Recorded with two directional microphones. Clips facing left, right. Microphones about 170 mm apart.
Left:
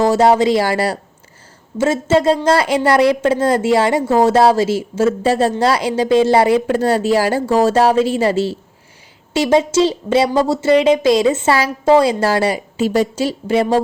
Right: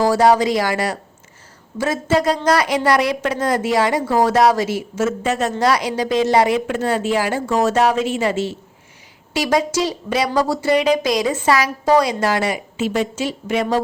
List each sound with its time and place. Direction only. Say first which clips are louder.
0.0 s a woman's voice: left 2 dB; 25° left (ahead or behind)